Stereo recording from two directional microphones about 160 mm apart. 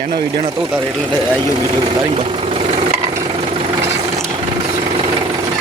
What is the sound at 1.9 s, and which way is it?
Vehicle, 35° right (ahead or behind).